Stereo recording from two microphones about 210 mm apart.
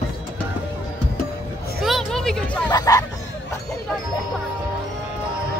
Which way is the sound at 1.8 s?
Centre (ahead or behind).